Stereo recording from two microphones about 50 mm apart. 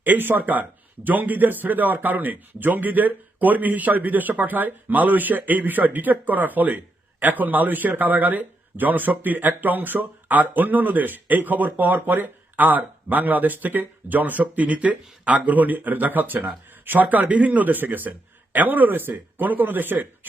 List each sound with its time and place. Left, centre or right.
0.0 s speech: right